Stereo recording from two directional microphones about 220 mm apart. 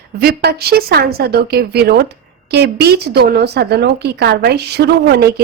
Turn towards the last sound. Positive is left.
turn(degrees=-45)  # may be behind; listen again after turning